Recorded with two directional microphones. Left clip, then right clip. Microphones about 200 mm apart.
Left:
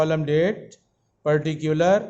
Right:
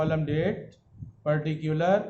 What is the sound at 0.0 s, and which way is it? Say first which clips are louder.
A man's voice: left 7 dB; 45° left (ahead or behind).